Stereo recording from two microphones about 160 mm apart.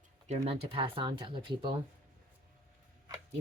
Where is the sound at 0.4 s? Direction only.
40° right (ahead or behind).